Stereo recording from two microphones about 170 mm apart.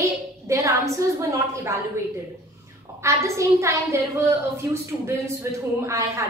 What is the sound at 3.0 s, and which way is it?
A woman's voice, 15° right (ahead or behind).